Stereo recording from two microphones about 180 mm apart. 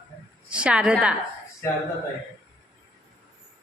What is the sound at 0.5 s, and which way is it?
Speech, 5° right (ahead or behind).